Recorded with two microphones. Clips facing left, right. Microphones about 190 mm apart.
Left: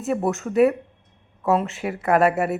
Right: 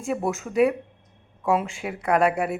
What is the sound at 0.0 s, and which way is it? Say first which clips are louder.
Speech: left 3 dB; centre (ahead or behind).